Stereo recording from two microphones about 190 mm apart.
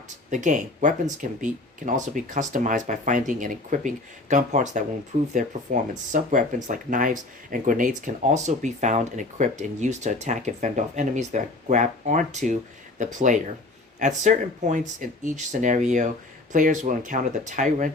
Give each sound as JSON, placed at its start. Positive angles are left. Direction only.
{"t": 0.3, "sound": "speech", "side_deg": -40}